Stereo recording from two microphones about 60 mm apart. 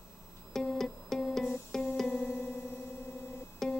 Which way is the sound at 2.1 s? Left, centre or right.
Left.